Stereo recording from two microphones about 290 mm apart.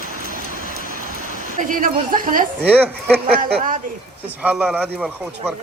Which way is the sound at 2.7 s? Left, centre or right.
Centre.